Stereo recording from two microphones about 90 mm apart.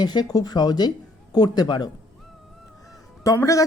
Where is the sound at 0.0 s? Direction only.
50° left (ahead or behind).